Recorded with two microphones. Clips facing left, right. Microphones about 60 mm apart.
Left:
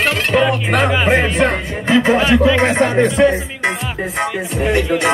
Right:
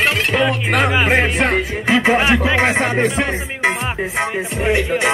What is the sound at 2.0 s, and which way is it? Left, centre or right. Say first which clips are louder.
Music: right 2 dB; right.